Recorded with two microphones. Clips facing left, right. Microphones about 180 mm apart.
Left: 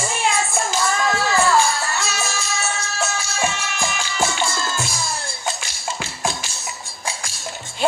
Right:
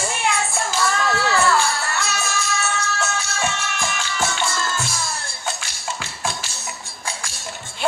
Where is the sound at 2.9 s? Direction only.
10° left (ahead or behind).